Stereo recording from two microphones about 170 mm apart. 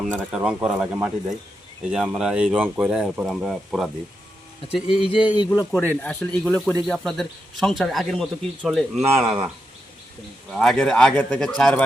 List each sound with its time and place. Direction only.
0.3 s speech: 5° right (ahead or behind)
4.7 s speech: 30° left (ahead or behind)
5.7 s speech: 5° left (ahead or behind)
9.0 s speech: 15° right (ahead or behind)
10.5 s speech: centre (ahead or behind)